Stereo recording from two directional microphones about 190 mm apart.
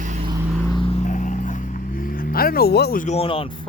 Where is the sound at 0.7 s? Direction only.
25° left (ahead or behind).